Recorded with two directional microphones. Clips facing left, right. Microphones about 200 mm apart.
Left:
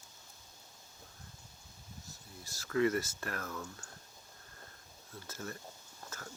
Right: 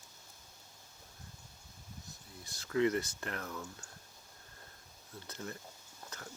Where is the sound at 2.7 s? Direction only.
20° right (ahead or behind).